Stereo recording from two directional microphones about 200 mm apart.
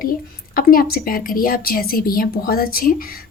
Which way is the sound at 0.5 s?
45° left (ahead or behind).